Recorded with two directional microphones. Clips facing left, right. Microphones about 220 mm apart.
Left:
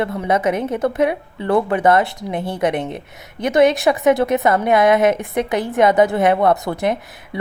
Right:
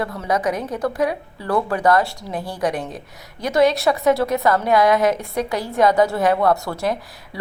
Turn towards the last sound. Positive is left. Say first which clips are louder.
# left 3 dB
turn(degrees=20)  # may be behind; listen again after turning